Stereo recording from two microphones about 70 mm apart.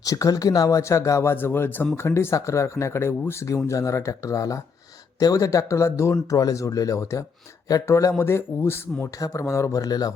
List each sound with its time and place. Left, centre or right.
0.0 s speech: left
1.2 s speech: left
8.2 s speech: left
9.1 s speech: left
9.4 s speech: left
9.8 s speech: left